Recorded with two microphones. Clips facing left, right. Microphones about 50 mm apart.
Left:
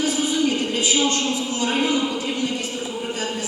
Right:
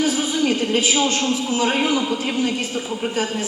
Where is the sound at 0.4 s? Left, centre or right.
Right.